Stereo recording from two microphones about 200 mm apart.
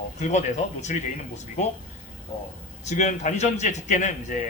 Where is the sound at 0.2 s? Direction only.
35° left (ahead or behind).